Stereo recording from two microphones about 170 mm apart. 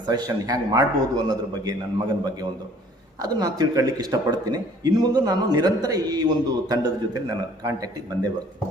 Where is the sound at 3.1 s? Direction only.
25° right (ahead or behind).